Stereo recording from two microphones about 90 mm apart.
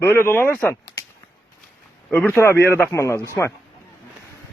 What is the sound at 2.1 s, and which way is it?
Speech, 20° left (ahead or behind).